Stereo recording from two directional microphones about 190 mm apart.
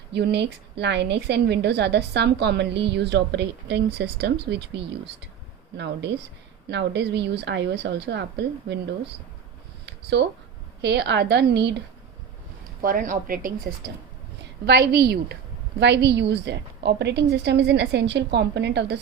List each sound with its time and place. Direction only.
0.1 s a woman's voice: 65° right (ahead or behind)
9.8 s a sound: 65° right (ahead or behind)
10.8 s a woman's voice: 65° right (ahead or behind)
12.8 s a woman's voice: 45° right (ahead or behind)
14.6 s a woman's voice: 55° right (ahead or behind)